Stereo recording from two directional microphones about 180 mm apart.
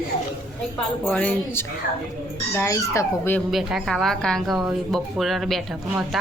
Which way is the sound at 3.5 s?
Centre (ahead or behind).